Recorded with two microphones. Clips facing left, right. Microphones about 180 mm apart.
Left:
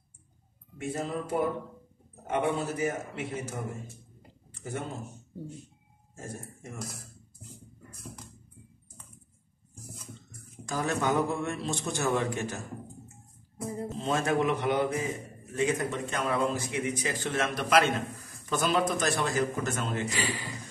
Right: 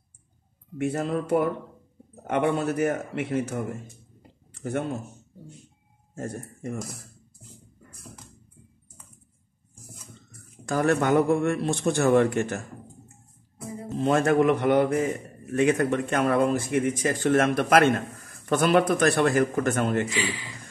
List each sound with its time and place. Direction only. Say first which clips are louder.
0.7 s a man's voice: right 6 dB; 65° right (ahead or behind)
4.6 s speech: right 8 dB; 70° right (ahead or behind)
6.1 s a man's voice: right 7 dB; 65° right (ahead or behind)
10.6 s a man's voice: right 7 dB; 60° right (ahead or behind)
13.9 s a man's voice: right 8 dB; 60° right (ahead or behind)
20.1 s speech: right 3 dB; 45° left (ahead or behind)